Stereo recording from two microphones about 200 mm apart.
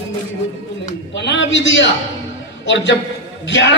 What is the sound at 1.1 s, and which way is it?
A man's voice, 60° left (ahead or behind).